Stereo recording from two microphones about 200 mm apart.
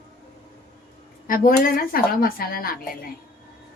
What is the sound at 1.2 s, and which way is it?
Speech, 45° left (ahead or behind).